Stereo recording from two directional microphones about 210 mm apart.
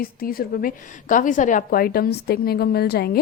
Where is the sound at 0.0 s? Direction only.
45° left (ahead or behind).